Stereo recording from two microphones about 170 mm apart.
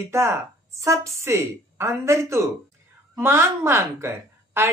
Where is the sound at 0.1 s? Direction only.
15° right (ahead or behind).